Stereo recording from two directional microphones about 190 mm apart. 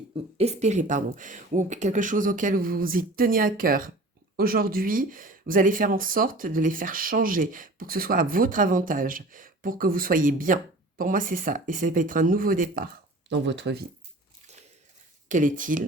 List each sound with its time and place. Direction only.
0.3 s speech: 35° right (ahead or behind)
13.5 s speech: 65° right (ahead or behind)
15.3 s speech: 45° right (ahead or behind)